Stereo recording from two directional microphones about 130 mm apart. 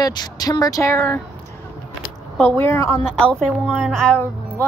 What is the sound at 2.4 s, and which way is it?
Speech, 20° left (ahead or behind).